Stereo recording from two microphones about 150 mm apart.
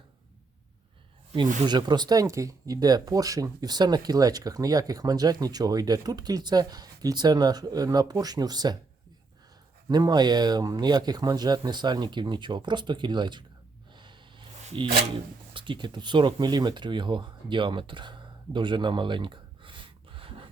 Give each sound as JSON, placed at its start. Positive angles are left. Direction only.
{"t": 1.6, "sound": "speech", "side_deg": -30}
{"t": 9.9, "sound": "speech", "side_deg": -25}
{"t": 13.9, "sound": "snort", "side_deg": -30}
{"t": 14.7, "sound": "speech", "side_deg": -35}